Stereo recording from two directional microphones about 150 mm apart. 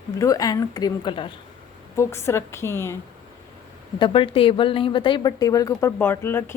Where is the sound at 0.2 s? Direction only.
25° left (ahead or behind).